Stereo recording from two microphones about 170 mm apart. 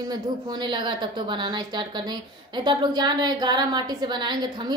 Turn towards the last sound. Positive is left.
turn(degrees=-25)  # may be behind; listen again after turning